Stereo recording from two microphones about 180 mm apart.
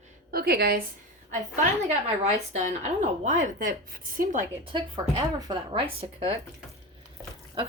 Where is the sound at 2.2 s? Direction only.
40° right (ahead or behind).